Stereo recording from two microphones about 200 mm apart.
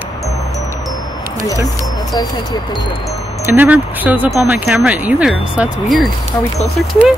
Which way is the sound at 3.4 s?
10° right (ahead or behind).